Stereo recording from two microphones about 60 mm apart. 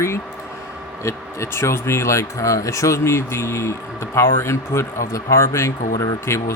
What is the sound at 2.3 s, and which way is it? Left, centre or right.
Speech, left.